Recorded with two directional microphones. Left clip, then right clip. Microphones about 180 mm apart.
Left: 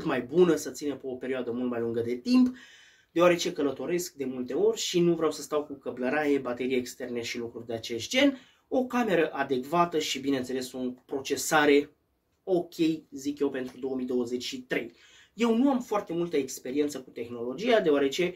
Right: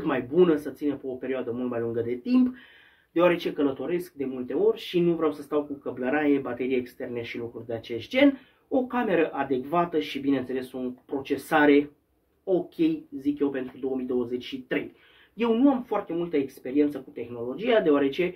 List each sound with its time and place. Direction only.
0.0 s speech: 20° left (ahead or behind)